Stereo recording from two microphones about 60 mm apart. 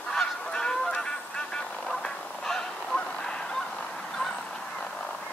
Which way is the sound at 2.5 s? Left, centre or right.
Centre.